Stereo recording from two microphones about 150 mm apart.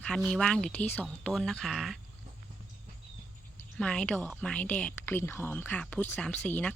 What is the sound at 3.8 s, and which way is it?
Speech, 5° left (ahead or behind).